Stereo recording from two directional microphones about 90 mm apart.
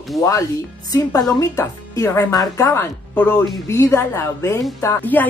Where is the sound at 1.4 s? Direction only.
35° left (ahead or behind).